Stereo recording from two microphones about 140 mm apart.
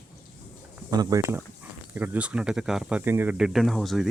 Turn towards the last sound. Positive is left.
turn(degrees=0)  # may be behind; listen again after turning